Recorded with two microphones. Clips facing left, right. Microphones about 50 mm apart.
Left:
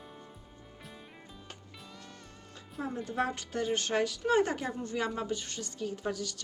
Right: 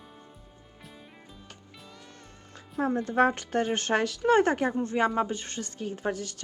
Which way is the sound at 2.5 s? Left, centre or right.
Right.